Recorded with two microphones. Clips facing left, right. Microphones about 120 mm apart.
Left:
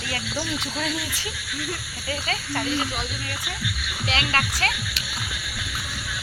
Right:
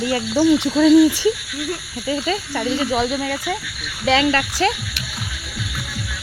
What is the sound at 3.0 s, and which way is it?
Speech, 85° right.